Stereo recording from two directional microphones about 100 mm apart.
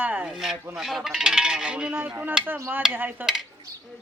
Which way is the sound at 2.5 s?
25° right (ahead or behind).